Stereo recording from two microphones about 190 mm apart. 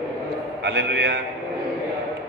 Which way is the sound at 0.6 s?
65° right (ahead or behind).